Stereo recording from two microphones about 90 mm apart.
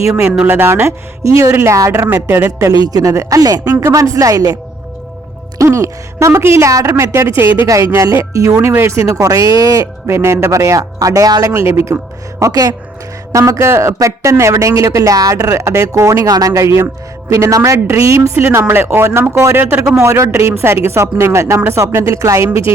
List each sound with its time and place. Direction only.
0.4 s speech: 25° right (ahead or behind)
2.1 s speech: 25° right (ahead or behind)
2.8 s speech: 40° right (ahead or behind)
5.5 s speech: 35° right (ahead or behind)
7.9 s speech: 35° right (ahead or behind)
12.4 s speech: 40° right (ahead or behind)